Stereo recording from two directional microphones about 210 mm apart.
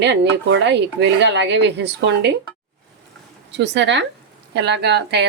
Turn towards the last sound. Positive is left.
turn(degrees=-50)  # may be behind; listen again after turning